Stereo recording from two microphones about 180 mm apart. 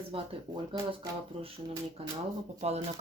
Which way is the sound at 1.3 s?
35° right (ahead or behind).